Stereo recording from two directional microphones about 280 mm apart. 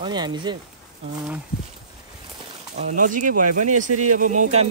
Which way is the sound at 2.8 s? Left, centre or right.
Right.